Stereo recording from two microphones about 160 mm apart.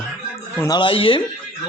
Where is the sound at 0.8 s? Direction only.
30° left (ahead or behind).